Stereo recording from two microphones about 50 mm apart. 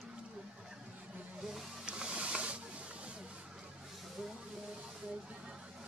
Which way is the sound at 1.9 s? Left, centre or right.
Right.